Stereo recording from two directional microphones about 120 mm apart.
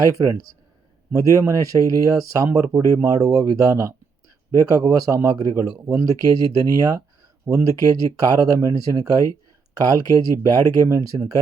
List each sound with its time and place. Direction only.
0.2 s speech: 35° right (ahead or behind)